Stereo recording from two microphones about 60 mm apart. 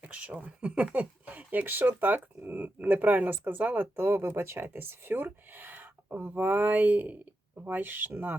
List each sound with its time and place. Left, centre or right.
0.0 s speech: right
3.9 s speech: right